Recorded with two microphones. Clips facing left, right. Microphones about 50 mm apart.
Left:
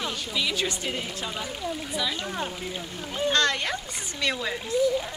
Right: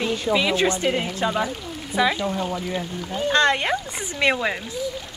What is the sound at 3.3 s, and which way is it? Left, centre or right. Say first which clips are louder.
Speech: right 8 dB; right.